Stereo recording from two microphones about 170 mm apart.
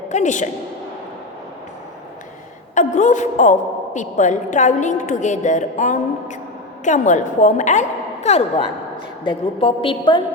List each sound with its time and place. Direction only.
0.1 s a woman's voice: 45° left (ahead or behind)
2.7 s a woman's voice: 45° left (ahead or behind); by 10.2 s 30° left (ahead or behind)